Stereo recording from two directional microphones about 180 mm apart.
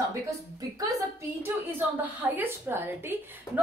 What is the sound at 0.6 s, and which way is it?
A woman's voice, 20° right (ahead or behind).